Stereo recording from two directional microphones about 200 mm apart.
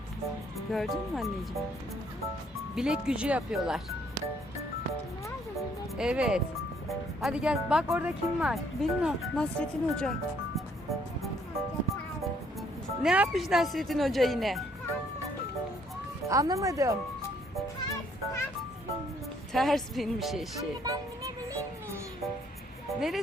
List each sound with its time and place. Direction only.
0.7 s speech: centre (ahead or behind)
2.6 s speech: 5° right (ahead or behind)
6.0 s speech: 5° right (ahead or behind)
13.0 s speech: 5° right (ahead or behind)
16.3 s speech: 15° right (ahead or behind)
19.5 s speech: centre (ahead or behind)
20.6 s speech: 15° right (ahead or behind)
23.0 s speech: centre (ahead or behind)